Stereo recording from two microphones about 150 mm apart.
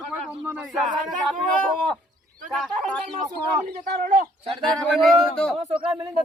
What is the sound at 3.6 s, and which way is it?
Speech, 75° right (ahead or behind).